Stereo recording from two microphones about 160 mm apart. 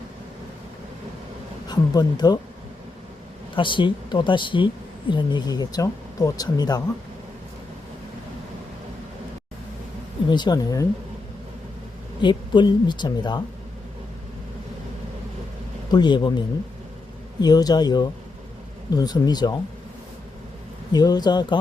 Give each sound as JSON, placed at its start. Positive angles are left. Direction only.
{"t": 1.6, "sound": "speech", "side_deg": 25}
{"t": 3.5, "sound": "speech", "side_deg": 30}
{"t": 10.2, "sound": "speech", "side_deg": 30}
{"t": 12.2, "sound": "speech", "side_deg": 30}
{"t": 15.9, "sound": "speech", "side_deg": 25}
{"t": 17.4, "sound": "speech", "side_deg": 25}
{"t": 20.9, "sound": "speech", "side_deg": 25}